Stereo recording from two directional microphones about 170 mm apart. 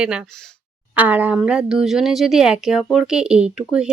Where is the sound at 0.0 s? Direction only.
5° right (ahead or behind).